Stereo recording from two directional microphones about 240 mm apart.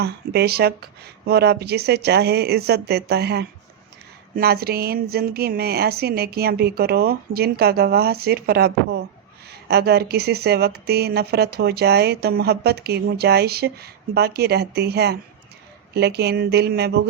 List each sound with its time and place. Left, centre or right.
0.0 s speech: right